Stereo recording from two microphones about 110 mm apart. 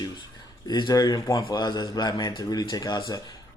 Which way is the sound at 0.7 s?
40° left (ahead or behind).